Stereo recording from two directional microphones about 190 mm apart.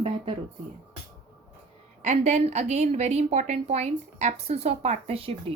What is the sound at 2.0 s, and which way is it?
A woman's voice, 40° right (ahead or behind).